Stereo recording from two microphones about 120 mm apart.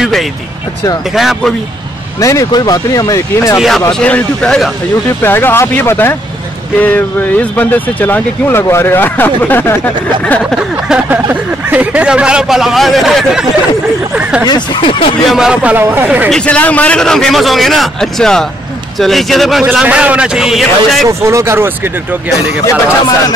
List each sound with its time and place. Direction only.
1.1 s a man's voice: centre (ahead or behind)
2.1 s speech: 25° left (ahead or behind)
3.5 s a man's voice: centre (ahead or behind)
5.2 s speech: 15° left (ahead or behind)
11.1 s speech: 15° right (ahead or behind)
14.5 s speech: 45° left (ahead or behind)
15.2 s speech: 5° right (ahead or behind)
16.3 s a man's voice: 10° left (ahead or behind)
21.1 s speech: 25° right (ahead or behind)